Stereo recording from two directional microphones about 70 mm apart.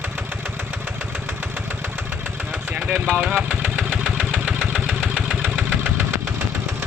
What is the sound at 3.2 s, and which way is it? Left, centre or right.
Vehicle, centre.